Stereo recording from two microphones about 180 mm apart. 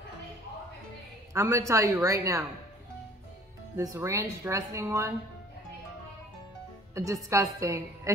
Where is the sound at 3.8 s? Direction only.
15° right (ahead or behind).